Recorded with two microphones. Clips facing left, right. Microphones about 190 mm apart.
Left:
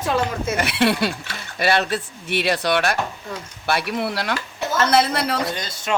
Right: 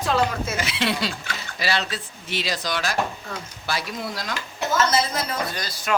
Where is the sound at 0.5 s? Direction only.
60° left (ahead or behind).